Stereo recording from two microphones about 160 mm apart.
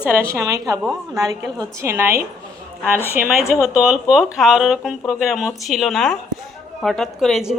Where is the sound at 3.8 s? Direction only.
5° right (ahead or behind).